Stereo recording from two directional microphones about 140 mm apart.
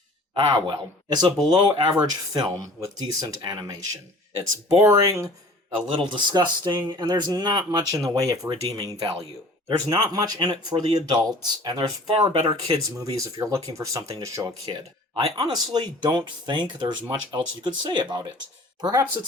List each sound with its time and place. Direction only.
0.3 s speech: 35° right (ahead or behind)
4.8 s speech: 25° right (ahead or behind)
6.0 s speech: 35° right (ahead or behind)
9.6 s speech: 30° right (ahead or behind)